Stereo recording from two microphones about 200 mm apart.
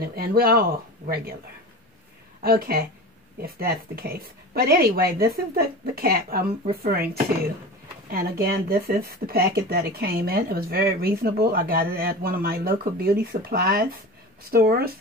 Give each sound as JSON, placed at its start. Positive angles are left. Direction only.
{"t": 0.0, "sound": "speech", "side_deg": -50}
{"t": 2.4, "sound": "speech", "side_deg": -50}
{"t": 8.1, "sound": "speech", "side_deg": -50}